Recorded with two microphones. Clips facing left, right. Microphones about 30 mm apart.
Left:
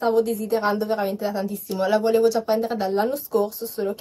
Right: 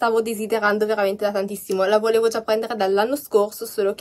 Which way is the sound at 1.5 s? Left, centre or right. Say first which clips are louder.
Right 2 dB; right.